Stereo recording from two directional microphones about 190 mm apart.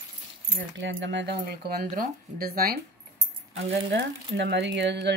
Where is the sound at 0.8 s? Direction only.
75° right (ahead or behind).